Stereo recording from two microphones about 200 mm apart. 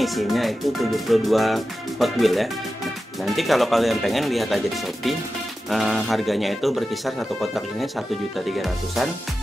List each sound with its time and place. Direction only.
0.0 s speech: centre (ahead or behind)
5.7 s speech: centre (ahead or behind)